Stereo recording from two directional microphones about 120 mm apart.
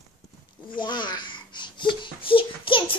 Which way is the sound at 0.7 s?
40° left (ahead or behind).